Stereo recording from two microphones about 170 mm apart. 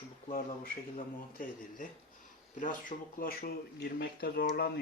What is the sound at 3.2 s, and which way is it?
Speech, 60° left (ahead or behind).